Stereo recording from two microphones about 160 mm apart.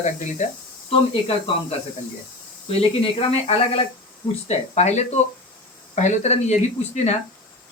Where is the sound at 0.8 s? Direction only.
35° left (ahead or behind).